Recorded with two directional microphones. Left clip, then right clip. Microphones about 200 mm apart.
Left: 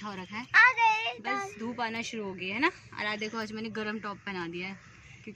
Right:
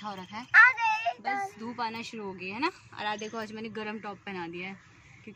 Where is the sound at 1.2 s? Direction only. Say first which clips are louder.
Right 1 dB; 10° left (ahead or behind).